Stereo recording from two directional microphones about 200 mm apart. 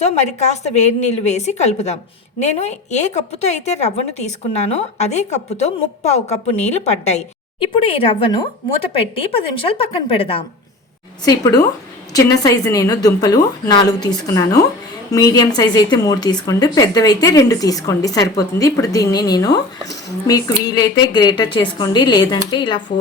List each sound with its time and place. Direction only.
0.0 s a woman's voice: 35° left (ahead or behind); by 14.1 s 20° left (ahead or behind)
15.1 s a woman's voice: 20° left (ahead or behind)